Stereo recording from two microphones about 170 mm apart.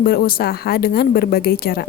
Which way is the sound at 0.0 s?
60° left (ahead or behind).